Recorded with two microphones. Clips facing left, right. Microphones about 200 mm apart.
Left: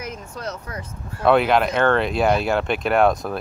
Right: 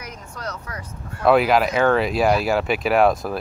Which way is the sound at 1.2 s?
5° right (ahead or behind).